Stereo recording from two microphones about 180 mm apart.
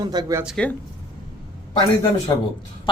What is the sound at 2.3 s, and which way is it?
Speech, 20° left (ahead or behind).